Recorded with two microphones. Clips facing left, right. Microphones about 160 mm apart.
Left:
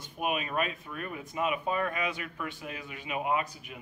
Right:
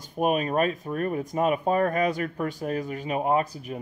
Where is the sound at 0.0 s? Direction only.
40° right (ahead or behind).